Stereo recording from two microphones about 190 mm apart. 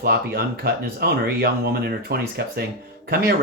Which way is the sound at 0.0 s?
55° right (ahead or behind).